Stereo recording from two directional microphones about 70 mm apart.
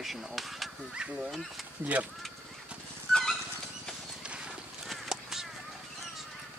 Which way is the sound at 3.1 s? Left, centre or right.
Centre.